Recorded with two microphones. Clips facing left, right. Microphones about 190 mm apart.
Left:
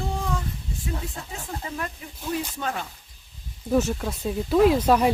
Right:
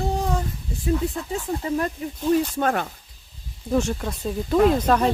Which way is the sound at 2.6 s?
55° right (ahead or behind).